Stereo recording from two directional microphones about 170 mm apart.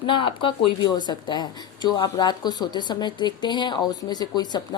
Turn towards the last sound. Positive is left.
turn(degrees=25)  # may be behind; listen again after turning